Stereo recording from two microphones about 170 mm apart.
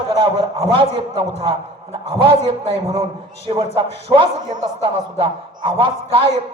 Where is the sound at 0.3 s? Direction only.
35° right (ahead or behind).